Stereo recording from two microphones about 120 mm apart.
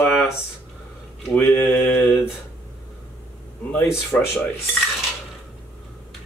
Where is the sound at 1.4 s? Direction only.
15° left (ahead or behind).